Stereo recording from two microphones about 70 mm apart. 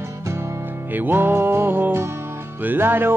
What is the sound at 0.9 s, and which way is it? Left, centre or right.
Music, right.